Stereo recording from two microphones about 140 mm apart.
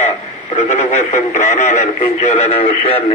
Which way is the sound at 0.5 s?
55° left (ahead or behind).